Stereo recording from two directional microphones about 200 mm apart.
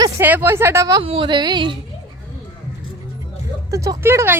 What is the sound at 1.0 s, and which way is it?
Speech, 25° right (ahead or behind).